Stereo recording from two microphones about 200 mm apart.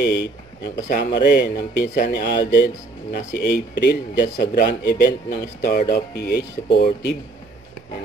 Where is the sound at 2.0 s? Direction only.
50° left (ahead or behind).